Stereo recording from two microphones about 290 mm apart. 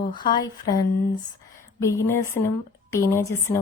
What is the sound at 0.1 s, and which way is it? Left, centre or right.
Speech, centre.